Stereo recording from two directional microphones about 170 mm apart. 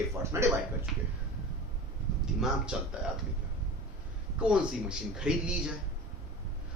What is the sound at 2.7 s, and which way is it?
Speech, 5° right (ahead or behind).